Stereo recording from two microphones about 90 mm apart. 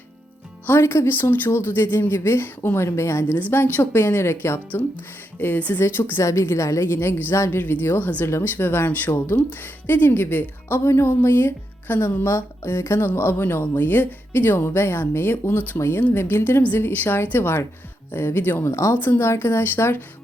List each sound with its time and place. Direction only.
0.7 s speech: 30° left (ahead or behind)
3.3 s speech: 20° left (ahead or behind)
4.7 s speech: 20° left (ahead or behind)